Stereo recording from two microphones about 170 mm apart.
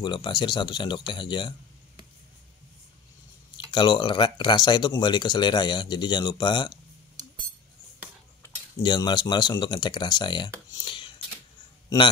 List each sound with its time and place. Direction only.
0.0 s speech: 25° left (ahead or behind)
3.5 s speech: 25° left (ahead or behind)
8.8 s speech: 25° left (ahead or behind)